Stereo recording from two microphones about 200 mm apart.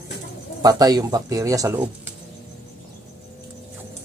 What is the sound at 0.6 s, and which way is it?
Speech, 20° right (ahead or behind).